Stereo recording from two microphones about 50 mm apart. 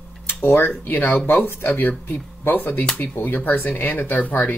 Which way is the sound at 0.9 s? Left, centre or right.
Left.